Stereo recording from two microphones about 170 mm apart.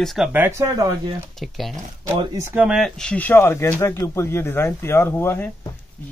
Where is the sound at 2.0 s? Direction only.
15° right (ahead or behind).